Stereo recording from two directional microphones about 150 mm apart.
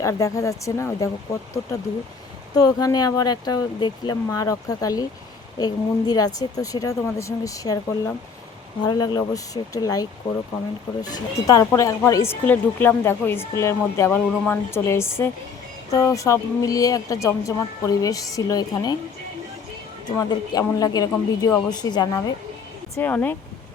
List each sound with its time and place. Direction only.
0.0 s speech: 20° left (ahead or behind)
2.6 s speech: 25° left (ahead or behind)
20.1 s speech: 25° left (ahead or behind)
23.0 s speech: 15° left (ahead or behind)